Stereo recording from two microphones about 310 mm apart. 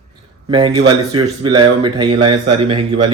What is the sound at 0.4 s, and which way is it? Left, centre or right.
Speech, centre.